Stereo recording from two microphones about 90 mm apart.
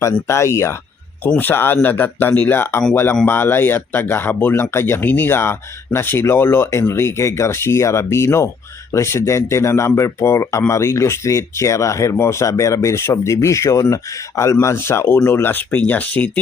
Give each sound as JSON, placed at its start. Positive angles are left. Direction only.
{"t": 0.0, "sound": "speech", "side_deg": 35}
{"t": 1.4, "sound": "speech", "side_deg": 25}